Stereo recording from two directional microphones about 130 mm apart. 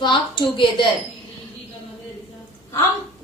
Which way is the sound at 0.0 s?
40° left (ahead or behind).